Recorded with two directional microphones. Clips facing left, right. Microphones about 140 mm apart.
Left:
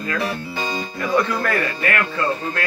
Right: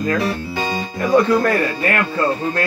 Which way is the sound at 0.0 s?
40° right (ahead or behind).